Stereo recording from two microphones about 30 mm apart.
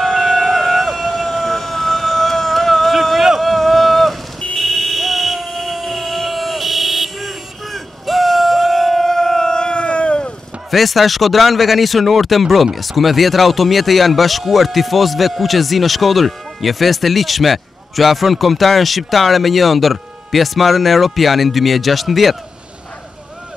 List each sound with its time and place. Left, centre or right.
0.0 s emergency vehicle: centre
2.9 s a sound: centre
3.3 s boat: centre
4.6 s buzzer: centre
9.0 s vehicle: centre; by 10.3 s left
10.7 s speech: centre